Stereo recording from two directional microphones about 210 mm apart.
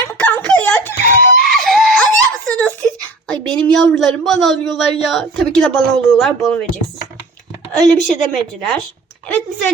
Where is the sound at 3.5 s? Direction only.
5° left (ahead or behind).